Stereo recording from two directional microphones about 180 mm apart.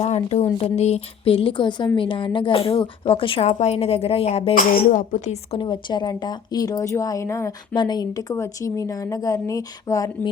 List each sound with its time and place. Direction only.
0.0 s a woman's voice: 35° left (ahead or behind)
4.5 s a woman's voice: 50° left (ahead or behind); by 10.1 s 20° left (ahead or behind)